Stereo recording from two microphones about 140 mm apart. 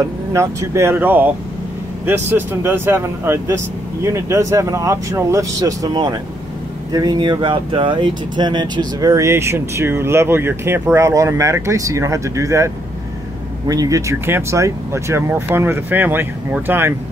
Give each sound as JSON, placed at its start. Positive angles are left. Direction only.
{"t": 0.3, "sound": "speech", "side_deg": -20}